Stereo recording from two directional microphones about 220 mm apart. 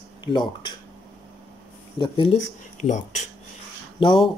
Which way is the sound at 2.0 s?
20° left (ahead or behind).